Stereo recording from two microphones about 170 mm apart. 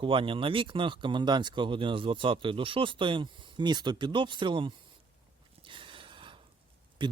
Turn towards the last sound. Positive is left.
turn(degrees=-30)  # may be behind; listen again after turning